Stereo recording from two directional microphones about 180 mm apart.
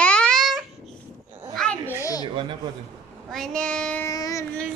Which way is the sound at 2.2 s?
25° right (ahead or behind).